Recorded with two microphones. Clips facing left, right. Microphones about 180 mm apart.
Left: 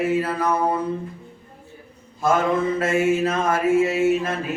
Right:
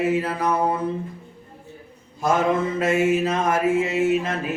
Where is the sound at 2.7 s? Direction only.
20° right (ahead or behind).